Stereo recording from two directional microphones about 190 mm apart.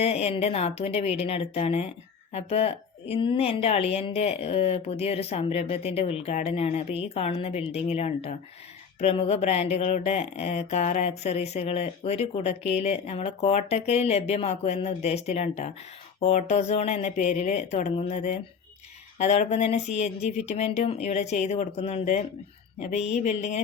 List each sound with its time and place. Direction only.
0.0 s speech: 35° left (ahead or behind)